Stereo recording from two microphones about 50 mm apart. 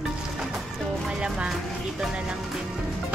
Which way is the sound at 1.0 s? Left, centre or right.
Centre.